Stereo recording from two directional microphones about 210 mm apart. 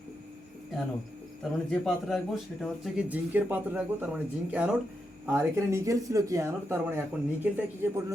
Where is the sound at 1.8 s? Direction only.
Centre (ahead or behind).